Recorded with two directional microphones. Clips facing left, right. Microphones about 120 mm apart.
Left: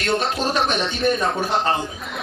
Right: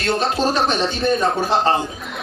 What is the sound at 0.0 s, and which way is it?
Speech, 35° right (ahead or behind).